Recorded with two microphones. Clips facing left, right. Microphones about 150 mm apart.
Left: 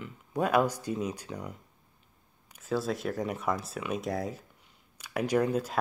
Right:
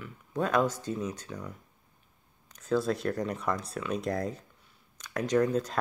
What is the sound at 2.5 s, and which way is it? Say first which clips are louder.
Speech: right 3 dB; 5° left (ahead or behind).